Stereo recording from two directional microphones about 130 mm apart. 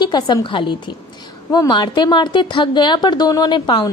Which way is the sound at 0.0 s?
35° left (ahead or behind).